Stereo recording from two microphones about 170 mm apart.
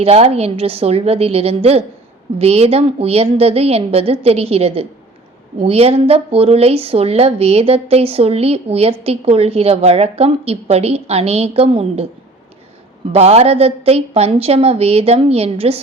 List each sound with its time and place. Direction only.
0.0 s a woman's voice: 35° right (ahead or behind)
13.1 s a woman's voice: 35° right (ahead or behind)